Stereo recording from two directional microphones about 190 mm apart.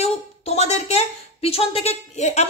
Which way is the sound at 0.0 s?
35° left (ahead or behind).